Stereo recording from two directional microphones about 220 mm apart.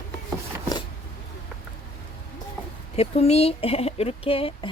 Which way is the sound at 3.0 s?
30° left (ahead or behind).